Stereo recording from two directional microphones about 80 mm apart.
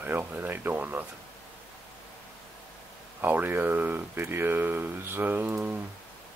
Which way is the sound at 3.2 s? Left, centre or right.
Right.